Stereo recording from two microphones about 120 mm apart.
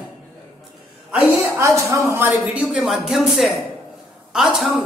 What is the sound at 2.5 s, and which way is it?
A woman's voice, 10° right (ahead or behind).